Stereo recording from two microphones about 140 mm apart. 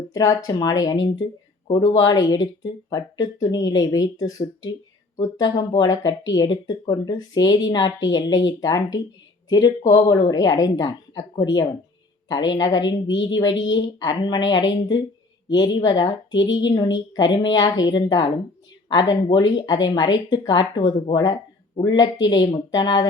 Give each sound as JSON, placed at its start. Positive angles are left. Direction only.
{"t": 0.1, "sound": "a woman's voice", "side_deg": 25}